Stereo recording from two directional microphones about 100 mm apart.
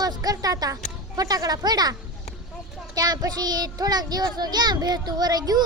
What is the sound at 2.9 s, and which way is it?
A child's voice, 40° right (ahead or behind).